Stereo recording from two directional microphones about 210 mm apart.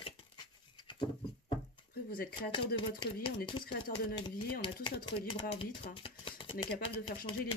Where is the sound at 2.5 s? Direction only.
25° left (ahead or behind).